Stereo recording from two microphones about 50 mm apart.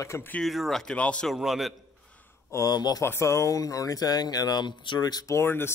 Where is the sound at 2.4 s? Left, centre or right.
Left.